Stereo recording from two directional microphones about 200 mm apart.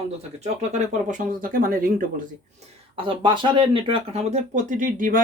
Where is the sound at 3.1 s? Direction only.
25° right (ahead or behind).